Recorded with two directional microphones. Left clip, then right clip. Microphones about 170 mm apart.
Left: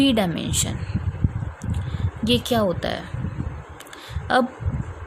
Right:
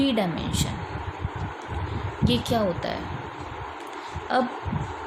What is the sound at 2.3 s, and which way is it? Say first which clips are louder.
Speech: left 4 dB; 55° left (ahead or behind).